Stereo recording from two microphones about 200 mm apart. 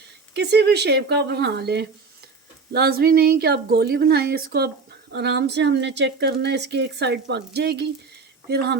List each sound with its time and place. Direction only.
0.3 s a woman's voice: 55° right (ahead or behind)